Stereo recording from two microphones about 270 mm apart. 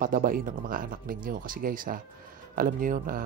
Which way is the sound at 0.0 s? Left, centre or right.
Right.